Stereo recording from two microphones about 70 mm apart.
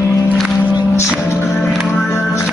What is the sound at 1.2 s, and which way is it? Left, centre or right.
Music, left.